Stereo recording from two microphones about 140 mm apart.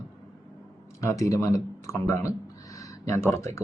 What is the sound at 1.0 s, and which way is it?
Speech, 25° left (ahead or behind).